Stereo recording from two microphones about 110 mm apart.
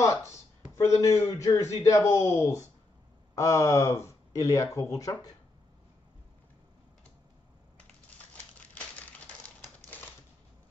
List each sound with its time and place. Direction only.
0.0 s speech: 25° left (ahead or behind)
8.5 s crumpling: 15° left (ahead or behind)